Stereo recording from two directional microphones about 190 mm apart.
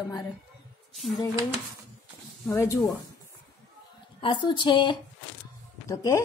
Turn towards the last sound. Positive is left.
turn(degrees=15)  # may be behind; listen again after turning